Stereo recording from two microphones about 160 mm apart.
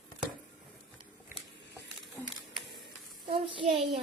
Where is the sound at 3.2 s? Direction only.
30° right (ahead or behind).